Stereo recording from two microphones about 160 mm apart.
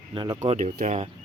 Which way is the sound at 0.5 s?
50° right (ahead or behind).